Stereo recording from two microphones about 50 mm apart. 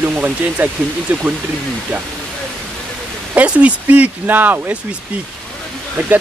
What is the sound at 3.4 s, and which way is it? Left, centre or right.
Speech, right.